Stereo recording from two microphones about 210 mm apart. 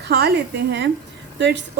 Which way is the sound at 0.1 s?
50° right (ahead or behind).